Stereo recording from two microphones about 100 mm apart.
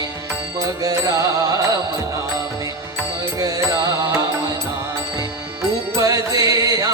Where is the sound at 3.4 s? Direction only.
35° right (ahead or behind).